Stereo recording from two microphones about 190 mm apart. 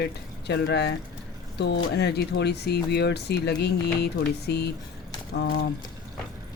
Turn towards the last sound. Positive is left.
turn(degrees=55)  # may be behind; listen again after turning